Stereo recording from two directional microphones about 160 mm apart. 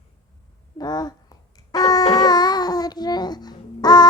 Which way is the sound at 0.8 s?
25° left (ahead or behind).